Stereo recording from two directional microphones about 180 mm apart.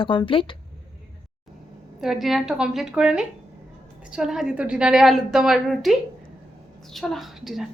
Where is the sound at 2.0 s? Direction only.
Centre (ahead or behind).